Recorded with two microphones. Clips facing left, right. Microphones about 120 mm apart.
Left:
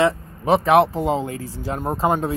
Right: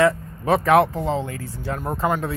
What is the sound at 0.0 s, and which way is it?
Speech, 25° left (ahead or behind).